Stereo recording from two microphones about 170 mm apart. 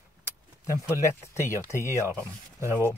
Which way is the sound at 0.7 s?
15° left (ahead or behind).